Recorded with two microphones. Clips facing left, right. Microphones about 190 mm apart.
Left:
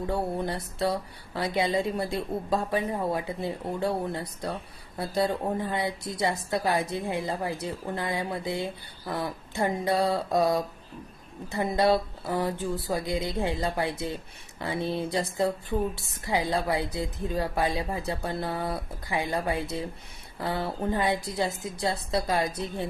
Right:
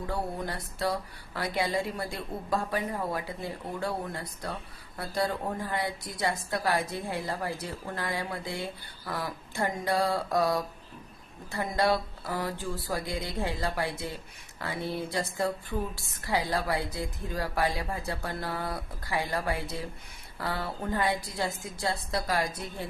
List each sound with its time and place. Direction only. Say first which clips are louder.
0.1 s speech: left 4 dB; 25° left (ahead or behind)